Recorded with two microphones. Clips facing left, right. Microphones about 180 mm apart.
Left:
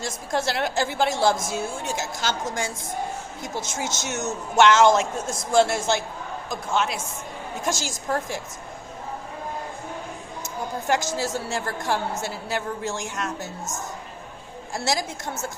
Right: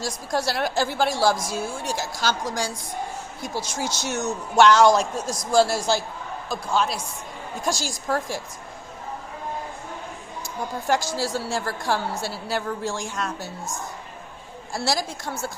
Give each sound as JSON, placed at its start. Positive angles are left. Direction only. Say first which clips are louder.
{"t": 0.0, "sound": "a woman's voice", "louder": "even", "side_deg": 25}
{"t": 10.4, "sound": "a woman's voice", "louder": "even", "side_deg": 20}
{"t": 14.8, "sound": "a woman's voice", "louder": "even", "side_deg": 20}